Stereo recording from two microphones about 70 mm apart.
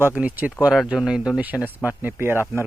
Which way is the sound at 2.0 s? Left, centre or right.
Right.